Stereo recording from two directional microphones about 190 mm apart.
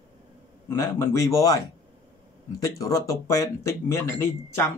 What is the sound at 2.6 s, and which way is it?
Speech, 15° left (ahead or behind).